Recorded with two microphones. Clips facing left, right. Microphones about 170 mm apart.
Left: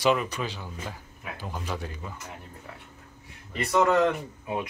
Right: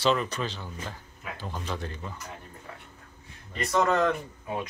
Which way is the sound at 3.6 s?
15° left (ahead or behind).